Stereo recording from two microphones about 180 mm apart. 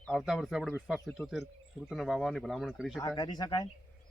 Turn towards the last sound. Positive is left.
turn(degrees=25)  # may be behind; listen again after turning